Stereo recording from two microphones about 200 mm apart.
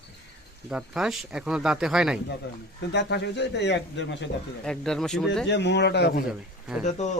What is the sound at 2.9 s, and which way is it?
Speech, 60° left (ahead or behind).